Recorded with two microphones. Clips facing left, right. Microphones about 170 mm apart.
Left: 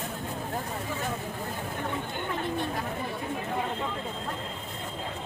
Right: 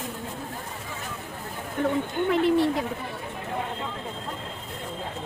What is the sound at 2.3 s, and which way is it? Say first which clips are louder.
Speech: right 10 dB; 90° right.